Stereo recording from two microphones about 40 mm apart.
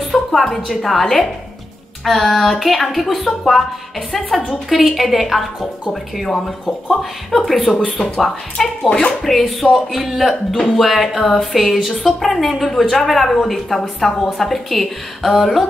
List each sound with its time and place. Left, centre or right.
0.1 s music: centre
0.7 s speech: centre
4.6 s speech: centre
9.2 s speech: centre